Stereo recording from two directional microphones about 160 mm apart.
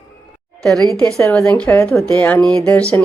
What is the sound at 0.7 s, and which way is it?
Speech, centre (ahead or behind).